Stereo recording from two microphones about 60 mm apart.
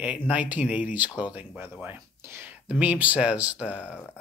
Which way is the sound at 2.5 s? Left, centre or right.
Right.